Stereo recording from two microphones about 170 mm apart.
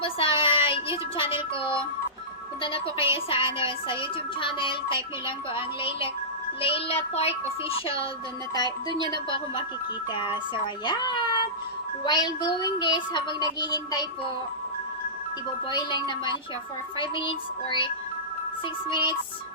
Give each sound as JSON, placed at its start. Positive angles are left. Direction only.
{"t": 0.0, "sound": "music", "side_deg": 30}
{"t": 2.6, "sound": "a child's voice", "side_deg": 30}
{"t": 15.7, "sound": "speech", "side_deg": 25}